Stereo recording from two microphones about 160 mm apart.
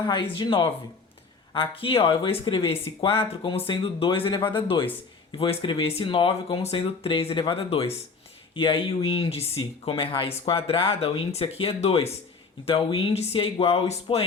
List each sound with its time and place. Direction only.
0.0 s speech: 30° left (ahead or behind)